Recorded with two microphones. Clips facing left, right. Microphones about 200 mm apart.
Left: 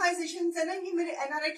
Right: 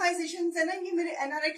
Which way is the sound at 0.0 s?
15° right (ahead or behind).